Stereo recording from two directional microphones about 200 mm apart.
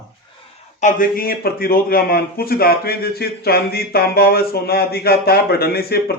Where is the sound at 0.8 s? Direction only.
45° left (ahead or behind).